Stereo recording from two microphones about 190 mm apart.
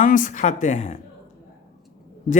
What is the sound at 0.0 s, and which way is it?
Speech, 45° left (ahead or behind).